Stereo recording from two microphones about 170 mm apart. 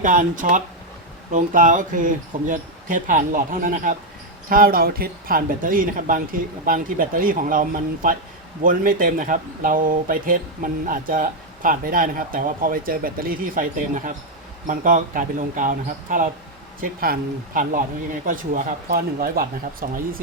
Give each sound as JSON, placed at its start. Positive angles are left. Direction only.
{"t": 0.0, "sound": "speech", "side_deg": -50}